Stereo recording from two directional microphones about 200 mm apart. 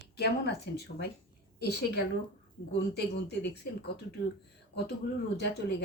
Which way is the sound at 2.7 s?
60° left (ahead or behind).